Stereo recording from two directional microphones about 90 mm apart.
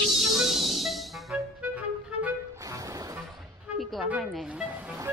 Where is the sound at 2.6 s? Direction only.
40° right (ahead or behind).